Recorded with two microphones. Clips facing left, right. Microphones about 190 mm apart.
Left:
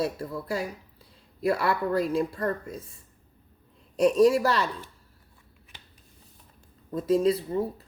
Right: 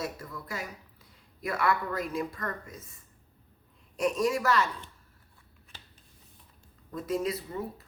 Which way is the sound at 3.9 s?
35° left (ahead or behind).